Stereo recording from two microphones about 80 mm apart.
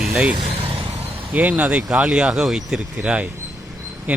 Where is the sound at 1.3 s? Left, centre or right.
Centre.